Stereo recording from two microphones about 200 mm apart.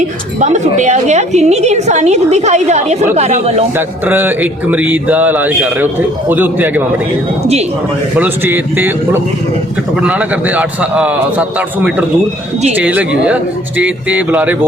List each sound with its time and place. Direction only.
0.3 s a woman's voice: 35° right (ahead or behind)
3.8 s speech: 10° right (ahead or behind)
8.2 s speech: 10° right (ahead or behind)